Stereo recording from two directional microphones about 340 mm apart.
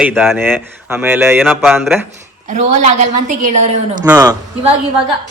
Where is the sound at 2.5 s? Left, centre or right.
Right.